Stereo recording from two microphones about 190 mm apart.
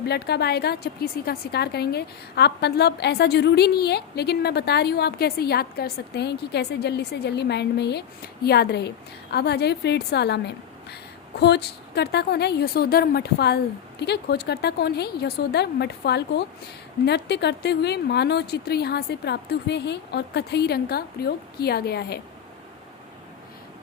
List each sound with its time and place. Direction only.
0.1 s a woman's voice: 60° left (ahead or behind)